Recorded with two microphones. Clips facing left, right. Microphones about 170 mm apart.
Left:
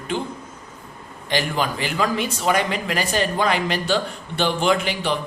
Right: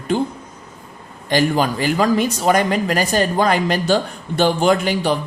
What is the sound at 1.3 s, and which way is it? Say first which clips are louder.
Speech: right 6 dB; 40° right (ahead or behind).